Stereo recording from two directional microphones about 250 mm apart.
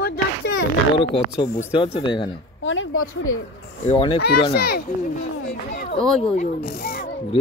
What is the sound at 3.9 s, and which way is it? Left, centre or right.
Speech, centre.